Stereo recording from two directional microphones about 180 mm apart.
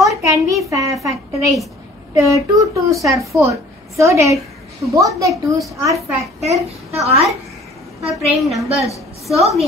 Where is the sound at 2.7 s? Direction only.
15° right (ahead or behind).